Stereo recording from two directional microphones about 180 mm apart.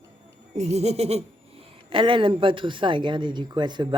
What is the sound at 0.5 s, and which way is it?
Speech, 35° right (ahead or behind).